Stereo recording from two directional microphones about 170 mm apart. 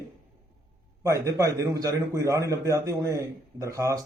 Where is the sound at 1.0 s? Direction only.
15° right (ahead or behind).